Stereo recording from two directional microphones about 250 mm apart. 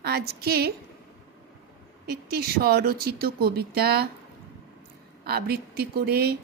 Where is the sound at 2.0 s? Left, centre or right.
Right.